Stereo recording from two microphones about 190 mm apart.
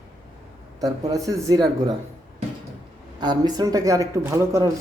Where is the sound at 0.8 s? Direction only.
20° right (ahead or behind).